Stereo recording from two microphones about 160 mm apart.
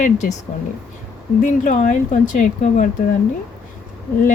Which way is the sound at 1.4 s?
50° left (ahead or behind).